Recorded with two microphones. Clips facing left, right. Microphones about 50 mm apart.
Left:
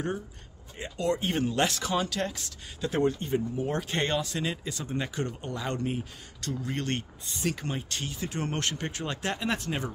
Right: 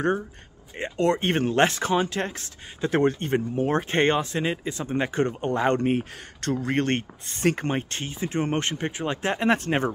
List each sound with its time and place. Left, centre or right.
0.7 s speech: right
1.7 s speech: right
2.9 s speech: right
3.8 s speech: right
9.4 s speech: right